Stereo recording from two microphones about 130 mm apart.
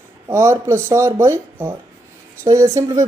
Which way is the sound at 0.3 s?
20° right (ahead or behind).